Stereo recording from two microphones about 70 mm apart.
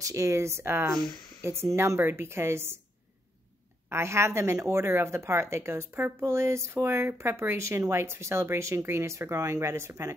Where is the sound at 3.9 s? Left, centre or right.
Right.